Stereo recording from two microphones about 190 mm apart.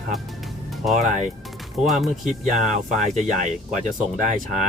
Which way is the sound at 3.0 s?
40° right (ahead or behind).